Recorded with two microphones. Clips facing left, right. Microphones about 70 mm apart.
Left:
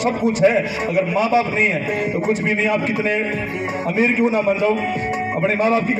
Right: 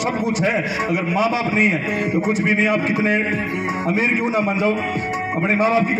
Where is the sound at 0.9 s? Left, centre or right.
Centre.